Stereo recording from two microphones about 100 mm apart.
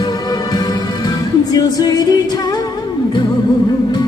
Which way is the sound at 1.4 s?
40° left (ahead or behind).